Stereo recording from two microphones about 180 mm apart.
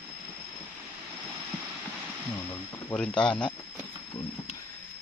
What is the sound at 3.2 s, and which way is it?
Speech, 5° left (ahead or behind).